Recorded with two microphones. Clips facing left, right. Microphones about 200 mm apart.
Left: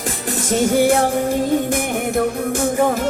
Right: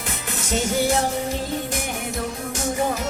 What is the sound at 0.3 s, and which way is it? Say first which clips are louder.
Music: left 7 dB; 55° left (ahead or behind).